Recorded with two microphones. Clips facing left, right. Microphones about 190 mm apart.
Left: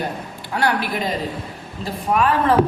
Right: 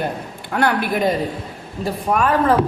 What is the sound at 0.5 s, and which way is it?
Speech, 50° right (ahead or behind).